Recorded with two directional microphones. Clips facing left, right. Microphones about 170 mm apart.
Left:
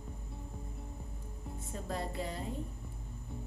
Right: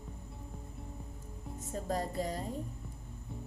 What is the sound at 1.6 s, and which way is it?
Music, 40° right (ahead or behind).